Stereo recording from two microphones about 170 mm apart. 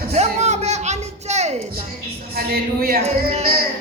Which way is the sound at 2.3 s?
65° right (ahead or behind).